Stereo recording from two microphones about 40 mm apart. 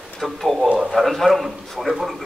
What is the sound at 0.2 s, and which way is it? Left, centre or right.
A man's voice, centre.